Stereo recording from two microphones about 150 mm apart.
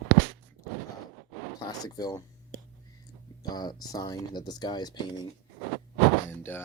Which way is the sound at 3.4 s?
25° left (ahead or behind).